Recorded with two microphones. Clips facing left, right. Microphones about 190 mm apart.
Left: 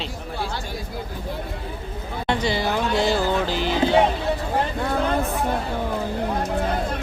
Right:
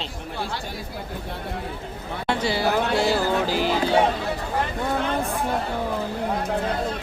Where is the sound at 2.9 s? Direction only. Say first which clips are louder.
Even; 5° right (ahead or behind).